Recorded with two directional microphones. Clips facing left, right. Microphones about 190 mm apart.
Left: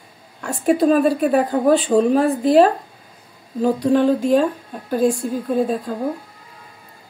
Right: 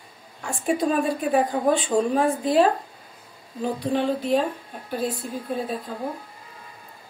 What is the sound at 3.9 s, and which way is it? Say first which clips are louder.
A woman's voice: left 6 dB; 45° left (ahead or behind).